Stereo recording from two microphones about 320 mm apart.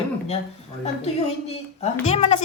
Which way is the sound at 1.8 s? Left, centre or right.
Centre.